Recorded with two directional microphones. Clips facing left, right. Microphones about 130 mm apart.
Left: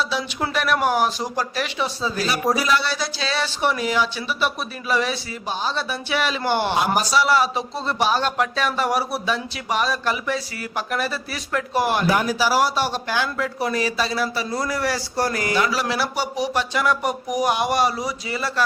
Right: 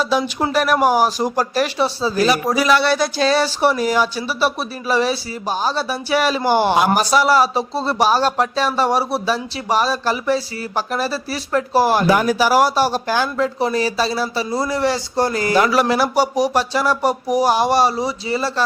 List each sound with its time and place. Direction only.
0.1 s speech: 45° right (ahead or behind)
2.1 s speech: 85° right; by 6.7 s 40° right (ahead or behind)
6.7 s a man's voice: 75° right (ahead or behind)
7.1 s speech: 45° right (ahead or behind)
12.0 s speech: 80° right; by 15.5 s 25° right (ahead or behind)
15.7 s speech: 50° right (ahead or behind); by 18.6 s 30° right (ahead or behind)